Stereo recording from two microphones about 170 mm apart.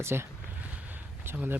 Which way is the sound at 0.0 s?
15° right (ahead or behind).